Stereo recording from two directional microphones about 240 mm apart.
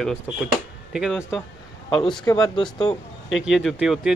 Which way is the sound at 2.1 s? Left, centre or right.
Centre.